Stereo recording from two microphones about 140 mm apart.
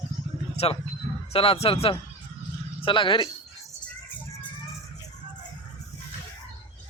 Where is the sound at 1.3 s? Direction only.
45° left (ahead or behind).